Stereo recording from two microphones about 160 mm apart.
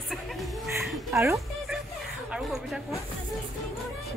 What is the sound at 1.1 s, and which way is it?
Speech, 20° right (ahead or behind).